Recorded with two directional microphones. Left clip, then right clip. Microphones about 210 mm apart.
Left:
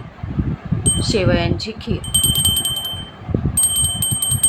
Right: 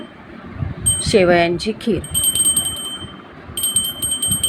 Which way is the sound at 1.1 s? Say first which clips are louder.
Right 7 dB; 20° right (ahead or behind).